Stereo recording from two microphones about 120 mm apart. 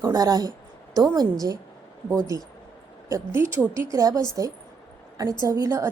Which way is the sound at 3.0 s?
25° right (ahead or behind).